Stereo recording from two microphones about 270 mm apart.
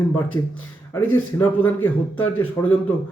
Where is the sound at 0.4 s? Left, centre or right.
Centre.